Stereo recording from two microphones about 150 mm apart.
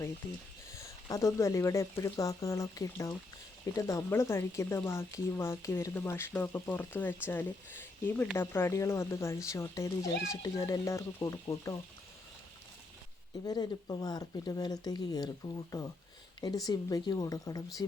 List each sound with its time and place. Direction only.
0.2 s speech: 15° left (ahead or behind)
13.4 s speech: 25° left (ahead or behind)